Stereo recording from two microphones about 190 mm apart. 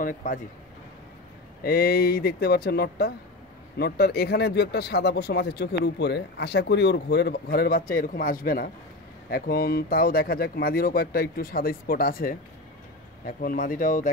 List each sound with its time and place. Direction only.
0.0 s speech: 45° left (ahead or behind)
1.6 s speech: 55° left (ahead or behind)